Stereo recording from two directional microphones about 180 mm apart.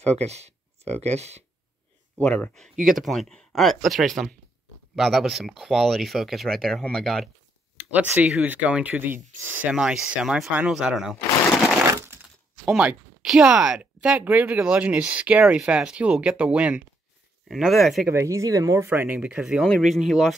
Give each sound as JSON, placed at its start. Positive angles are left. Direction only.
{"t": 0.1, "sound": "speech", "side_deg": -35}
{"t": 2.1, "sound": "speech", "side_deg": 10}
{"t": 11.8, "sound": "a sound", "side_deg": -15}
{"t": 12.6, "sound": "speech", "side_deg": -5}
{"t": 18.1, "sound": "speech", "side_deg": -15}